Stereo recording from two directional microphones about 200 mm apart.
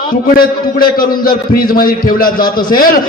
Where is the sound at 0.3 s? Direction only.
45° left (ahead or behind).